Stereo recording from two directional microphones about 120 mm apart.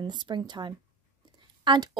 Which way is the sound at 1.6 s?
40° right (ahead or behind).